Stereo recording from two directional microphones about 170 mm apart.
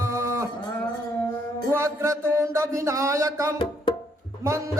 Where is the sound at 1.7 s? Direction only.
15° right (ahead or behind).